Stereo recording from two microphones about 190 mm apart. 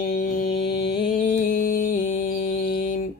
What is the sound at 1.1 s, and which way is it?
Mantra, 45° left (ahead or behind).